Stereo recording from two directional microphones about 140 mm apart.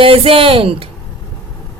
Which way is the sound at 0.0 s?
40° right (ahead or behind).